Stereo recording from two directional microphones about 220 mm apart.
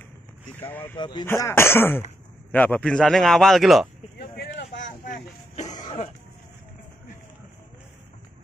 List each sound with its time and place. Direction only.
0.6 s speech: 10° left (ahead or behind)
0.9 s a man's voice: 20° left (ahead or behind); by 3.9 s centre (ahead or behind)
4.2 s a sound: 50° left (ahead or behind)